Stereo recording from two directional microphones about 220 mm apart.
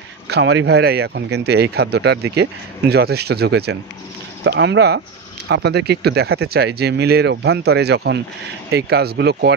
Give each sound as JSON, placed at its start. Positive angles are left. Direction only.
{"t": 0.3, "sound": "speech", "side_deg": -55}